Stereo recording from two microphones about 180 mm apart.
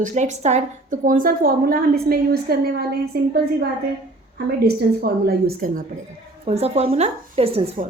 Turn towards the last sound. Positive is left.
turn(degrees=-35)  # may be behind; listen again after turning